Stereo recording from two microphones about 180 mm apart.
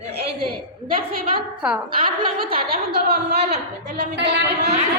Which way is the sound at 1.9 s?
30° right (ahead or behind).